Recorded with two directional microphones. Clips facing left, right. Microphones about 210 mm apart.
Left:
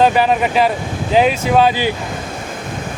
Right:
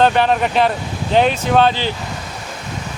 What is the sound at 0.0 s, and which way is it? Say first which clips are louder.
Speech: left 1 dB; 5° left (ahead or behind).